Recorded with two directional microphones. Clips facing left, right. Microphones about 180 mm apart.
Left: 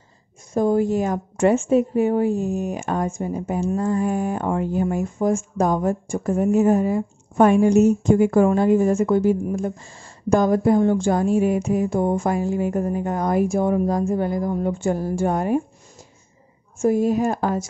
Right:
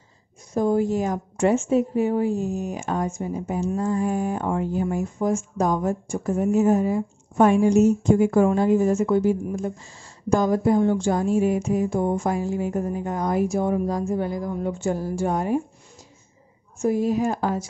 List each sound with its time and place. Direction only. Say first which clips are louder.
0.6 s a woman's voice: left 2 dB; 55° left (ahead or behind)
16.7 s speech: left 3 dB; 50° left (ahead or behind)